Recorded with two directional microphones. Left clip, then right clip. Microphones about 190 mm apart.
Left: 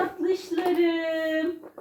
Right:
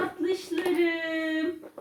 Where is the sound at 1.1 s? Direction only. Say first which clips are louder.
Left 3 dB; 25° right (ahead or behind).